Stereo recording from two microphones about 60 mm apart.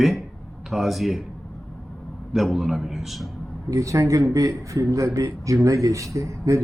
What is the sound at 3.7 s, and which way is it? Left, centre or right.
Speech, right.